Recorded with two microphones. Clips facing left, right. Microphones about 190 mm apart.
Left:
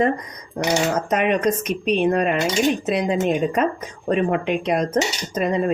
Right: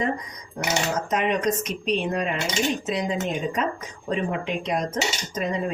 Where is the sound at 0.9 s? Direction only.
60° left (ahead or behind).